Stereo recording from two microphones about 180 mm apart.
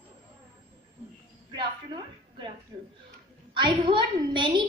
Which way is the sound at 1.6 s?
25° right (ahead or behind).